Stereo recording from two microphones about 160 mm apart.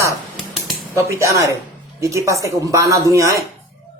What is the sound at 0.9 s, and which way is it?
Speech, 20° right (ahead or behind).